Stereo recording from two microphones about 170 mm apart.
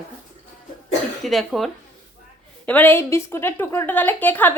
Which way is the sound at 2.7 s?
10° left (ahead or behind).